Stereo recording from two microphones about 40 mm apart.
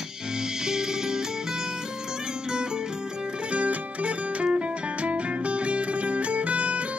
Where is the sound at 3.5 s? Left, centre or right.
Right.